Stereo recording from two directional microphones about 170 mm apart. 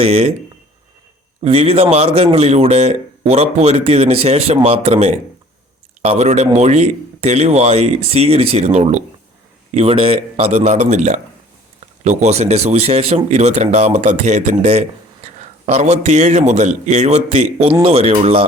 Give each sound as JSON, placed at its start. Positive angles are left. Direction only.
{"t": 0.0, "sound": "speech", "side_deg": -35}
{"t": 1.4, "sound": "speech", "side_deg": -35}